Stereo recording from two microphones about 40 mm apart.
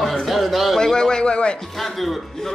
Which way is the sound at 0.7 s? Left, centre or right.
Centre.